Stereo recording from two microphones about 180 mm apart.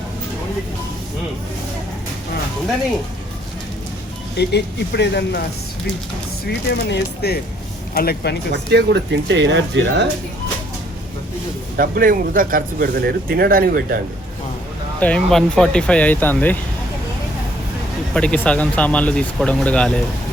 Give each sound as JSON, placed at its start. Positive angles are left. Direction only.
{"t": 4.4, "sound": "speech", "side_deg": 65}
{"t": 6.4, "sound": "speech", "side_deg": 65}
{"t": 8.7, "sound": "speech", "side_deg": -75}
{"t": 11.8, "sound": "speech", "side_deg": -50}
{"t": 15.0, "sound": "speech", "side_deg": 5}
{"t": 18.1, "sound": "speech", "side_deg": 5}